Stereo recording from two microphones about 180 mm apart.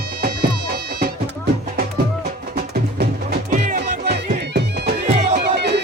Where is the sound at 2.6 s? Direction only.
55° right (ahead or behind).